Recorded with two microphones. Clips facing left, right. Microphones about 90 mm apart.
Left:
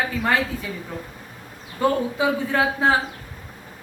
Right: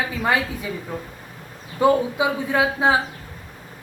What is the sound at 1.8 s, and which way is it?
A woman's voice, 15° right (ahead or behind).